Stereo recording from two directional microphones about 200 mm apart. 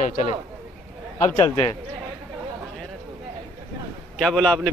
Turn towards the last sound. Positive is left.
turn(degrees=5)  # may be behind; listen again after turning